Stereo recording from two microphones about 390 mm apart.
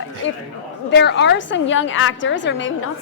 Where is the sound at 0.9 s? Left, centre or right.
Left.